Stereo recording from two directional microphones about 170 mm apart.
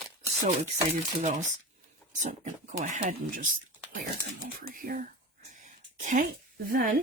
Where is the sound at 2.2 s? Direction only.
45° right (ahead or behind).